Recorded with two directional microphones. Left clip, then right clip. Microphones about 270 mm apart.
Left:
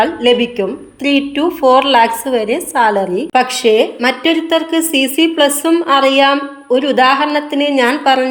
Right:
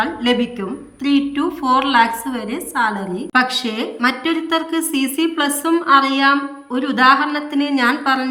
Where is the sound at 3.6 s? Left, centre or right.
Right.